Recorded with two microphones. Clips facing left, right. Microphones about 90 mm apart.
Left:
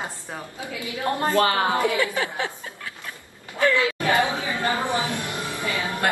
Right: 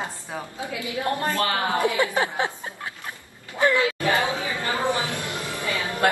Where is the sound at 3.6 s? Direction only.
20° right (ahead or behind).